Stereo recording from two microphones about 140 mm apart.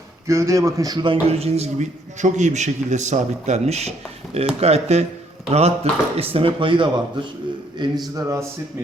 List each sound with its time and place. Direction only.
0.3 s a man's voice: 20° right (ahead or behind)
8.1 s speech: 20° right (ahead or behind)